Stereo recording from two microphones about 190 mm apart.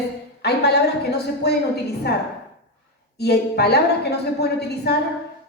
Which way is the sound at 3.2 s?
60° left (ahead or behind).